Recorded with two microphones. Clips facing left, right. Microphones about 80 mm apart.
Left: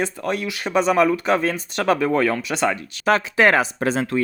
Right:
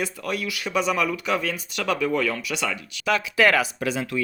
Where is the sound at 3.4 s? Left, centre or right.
Left.